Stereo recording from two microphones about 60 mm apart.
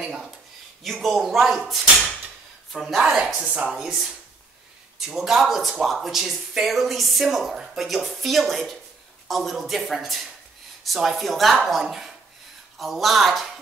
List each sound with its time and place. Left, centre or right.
0.0 s speech: centre
3.0 s speech: centre
3.7 s speech: centre